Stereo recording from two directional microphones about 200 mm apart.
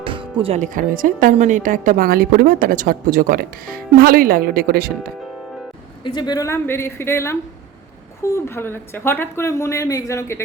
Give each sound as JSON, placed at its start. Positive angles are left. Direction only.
{"t": 0.0, "sound": "speech", "side_deg": -25}
{"t": 6.1, "sound": "speech", "side_deg": 20}
{"t": 8.4, "sound": "speech", "side_deg": 10}